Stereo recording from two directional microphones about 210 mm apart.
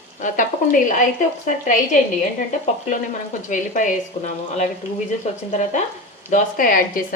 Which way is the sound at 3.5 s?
35° left (ahead or behind).